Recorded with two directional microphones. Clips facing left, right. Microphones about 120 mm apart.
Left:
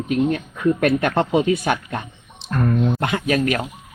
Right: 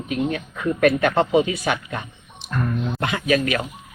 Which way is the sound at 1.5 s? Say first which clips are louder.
Left 4 dB; 50° left (ahead or behind).